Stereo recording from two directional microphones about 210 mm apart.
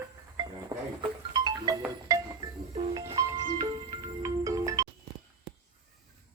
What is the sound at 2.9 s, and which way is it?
Music, 15° right (ahead or behind).